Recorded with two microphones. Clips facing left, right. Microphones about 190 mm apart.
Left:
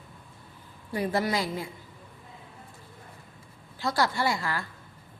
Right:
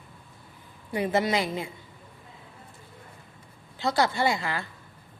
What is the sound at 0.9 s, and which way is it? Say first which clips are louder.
Speech: right 2 dB; 20° right (ahead or behind).